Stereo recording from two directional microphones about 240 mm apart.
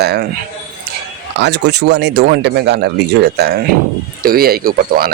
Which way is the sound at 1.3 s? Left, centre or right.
Right.